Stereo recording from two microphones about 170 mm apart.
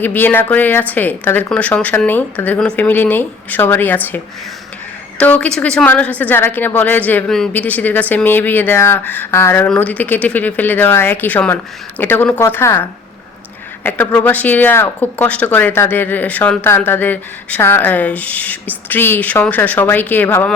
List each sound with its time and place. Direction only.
0.0 s speech: 10° left (ahead or behind)
5.2 s speech: 10° left (ahead or behind)